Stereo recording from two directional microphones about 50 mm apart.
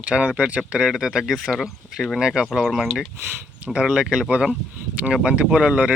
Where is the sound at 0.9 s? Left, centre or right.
Centre.